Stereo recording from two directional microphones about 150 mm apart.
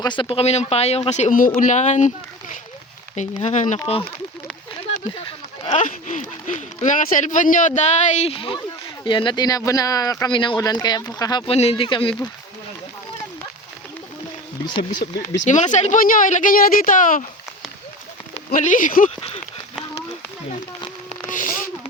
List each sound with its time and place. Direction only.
0.0 s speech: 30° left (ahead or behind); by 1.4 s 50° left (ahead or behind)
1.4 s speech: 65° left (ahead or behind)
3.2 s speech: 50° left (ahead or behind)
3.8 s speech: 40° left (ahead or behind)
5.6 s speech: 55° left (ahead or behind); by 11.4 s 30° left (ahead or behind)
11.4 s speech: 40° left (ahead or behind)
14.9 s speech: 90° left
15.4 s speech: 55° left (ahead or behind)
18.5 s speech: 60° left (ahead or behind)
21.1 s a sound: 60° left (ahead or behind)